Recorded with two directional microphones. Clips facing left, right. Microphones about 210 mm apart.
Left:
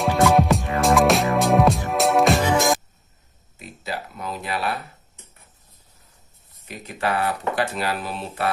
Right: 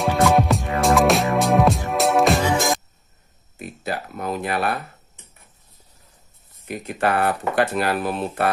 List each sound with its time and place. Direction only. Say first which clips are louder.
0.0 s music: even; centre (ahead or behind)
3.5 s a sound: right 3 dB; 50° right (ahead or behind)
6.7 s speech: right 4 dB; 55° right (ahead or behind)